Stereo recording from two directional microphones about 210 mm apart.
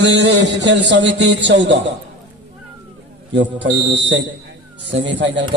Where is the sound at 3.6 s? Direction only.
60° right (ahead or behind).